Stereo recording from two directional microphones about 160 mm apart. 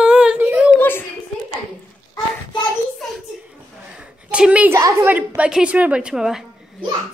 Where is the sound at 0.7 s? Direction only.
10° left (ahead or behind).